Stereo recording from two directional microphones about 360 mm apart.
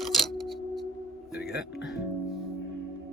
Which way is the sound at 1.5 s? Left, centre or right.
Left.